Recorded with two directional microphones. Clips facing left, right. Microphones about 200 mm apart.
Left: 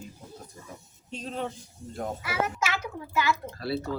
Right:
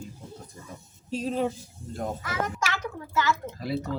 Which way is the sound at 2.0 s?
10° left (ahead or behind).